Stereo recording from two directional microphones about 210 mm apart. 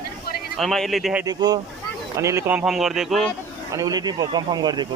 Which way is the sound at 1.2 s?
20° right (ahead or behind).